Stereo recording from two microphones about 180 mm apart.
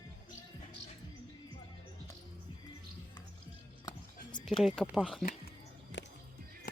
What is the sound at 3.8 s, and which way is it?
Music, 25° left (ahead or behind).